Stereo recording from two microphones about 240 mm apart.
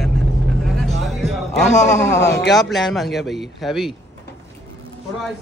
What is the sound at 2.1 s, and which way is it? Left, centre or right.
Speech, left.